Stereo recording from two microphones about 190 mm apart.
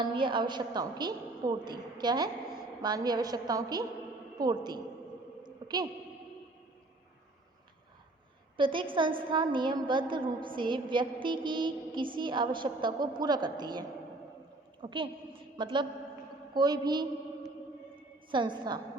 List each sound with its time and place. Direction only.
0.0 s a woman's voice: 25° right (ahead or behind)
5.4 s a sound: 20° right (ahead or behind)
8.5 s a woman's voice: 25° right (ahead or behind)
18.3 s a woman's voice: 25° right (ahead or behind)